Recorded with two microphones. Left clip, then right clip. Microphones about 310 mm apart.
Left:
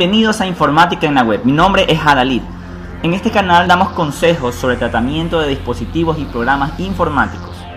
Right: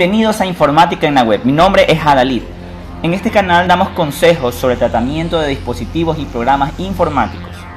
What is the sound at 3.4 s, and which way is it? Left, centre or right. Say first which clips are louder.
Speech: even; centre.